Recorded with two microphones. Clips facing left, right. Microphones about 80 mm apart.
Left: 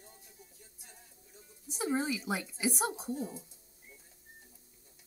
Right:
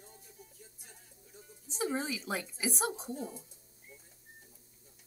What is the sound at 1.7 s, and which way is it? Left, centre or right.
Speech, centre.